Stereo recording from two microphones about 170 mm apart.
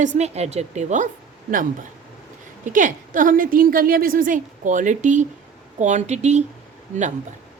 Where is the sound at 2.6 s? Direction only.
50° right (ahead or behind).